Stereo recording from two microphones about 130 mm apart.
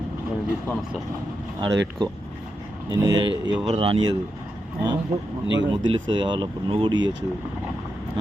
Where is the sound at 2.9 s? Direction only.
30° right (ahead or behind).